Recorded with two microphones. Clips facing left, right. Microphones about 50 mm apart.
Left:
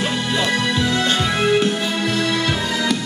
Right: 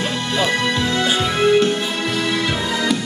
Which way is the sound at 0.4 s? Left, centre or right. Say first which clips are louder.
Right 2 dB; centre.